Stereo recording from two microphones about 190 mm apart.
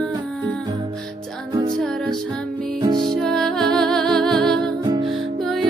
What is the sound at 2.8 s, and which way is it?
Music, 25° right (ahead or behind).